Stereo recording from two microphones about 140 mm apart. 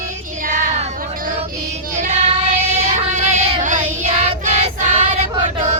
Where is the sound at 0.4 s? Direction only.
75° right (ahead or behind).